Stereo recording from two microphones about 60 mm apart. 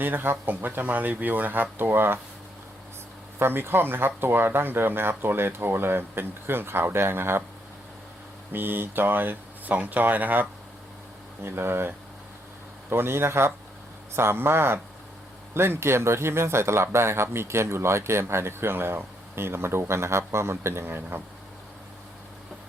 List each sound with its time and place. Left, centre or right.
0.0 s speech: right
3.3 s speech: right
8.5 s speech: right
11.4 s speech: right